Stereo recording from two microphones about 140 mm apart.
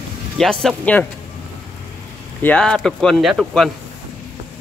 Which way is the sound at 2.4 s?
5° left (ahead or behind).